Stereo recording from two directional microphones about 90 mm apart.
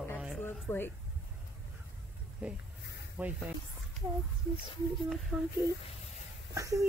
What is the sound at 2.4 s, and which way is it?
Speech, 15° right (ahead or behind).